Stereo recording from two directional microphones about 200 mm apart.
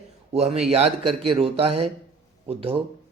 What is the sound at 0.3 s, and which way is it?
A man's voice, 30° right (ahead or behind).